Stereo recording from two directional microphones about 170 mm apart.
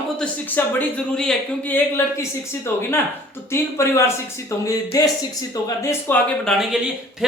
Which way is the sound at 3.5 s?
15° left (ahead or behind).